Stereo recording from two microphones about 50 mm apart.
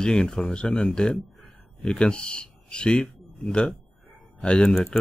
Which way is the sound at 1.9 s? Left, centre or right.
Centre.